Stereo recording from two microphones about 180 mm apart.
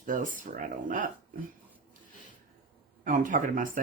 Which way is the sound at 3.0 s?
45° right (ahead or behind).